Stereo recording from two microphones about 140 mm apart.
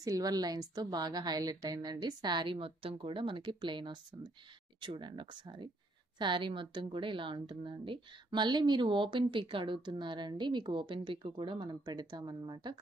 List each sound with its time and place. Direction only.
0.0 s a woman's voice: 25° right (ahead or behind)